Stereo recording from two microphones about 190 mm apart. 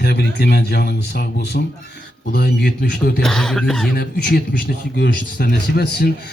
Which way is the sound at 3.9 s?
50° left (ahead or behind).